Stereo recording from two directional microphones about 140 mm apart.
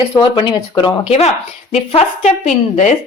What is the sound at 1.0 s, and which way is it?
A woman's voice, 50° left (ahead or behind).